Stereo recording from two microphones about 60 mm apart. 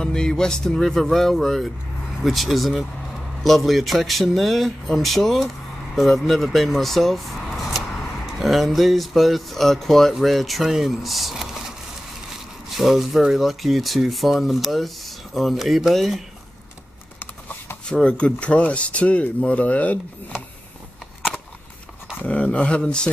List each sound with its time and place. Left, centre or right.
0.0 s speech: centre
12.6 s speech: centre
17.8 s speech: centre
22.2 s speech: left